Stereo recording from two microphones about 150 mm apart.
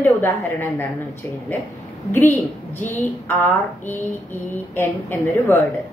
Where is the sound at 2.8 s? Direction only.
15° left (ahead or behind).